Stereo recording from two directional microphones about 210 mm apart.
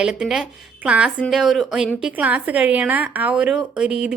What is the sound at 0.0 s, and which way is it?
A woman's voice, 5° right (ahead or behind).